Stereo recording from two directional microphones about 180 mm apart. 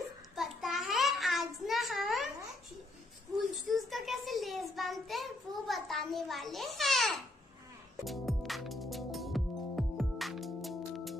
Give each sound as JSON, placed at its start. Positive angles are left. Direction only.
{"t": 0.4, "sound": "child singing", "side_deg": 0}
{"t": 3.4, "sound": "child singing", "side_deg": 0}
{"t": 8.0, "sound": "music", "side_deg": 0}